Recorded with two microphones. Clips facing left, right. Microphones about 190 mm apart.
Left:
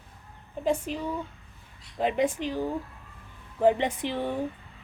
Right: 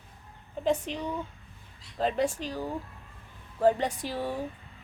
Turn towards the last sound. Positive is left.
turn(degrees=20)  # may be behind; listen again after turning